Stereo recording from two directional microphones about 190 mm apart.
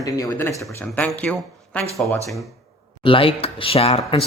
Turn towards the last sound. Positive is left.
turn(degrees=30)  # may be behind; listen again after turning